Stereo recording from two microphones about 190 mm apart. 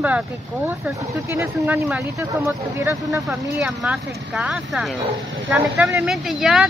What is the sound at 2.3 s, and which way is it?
Speech, 15° right (ahead or behind).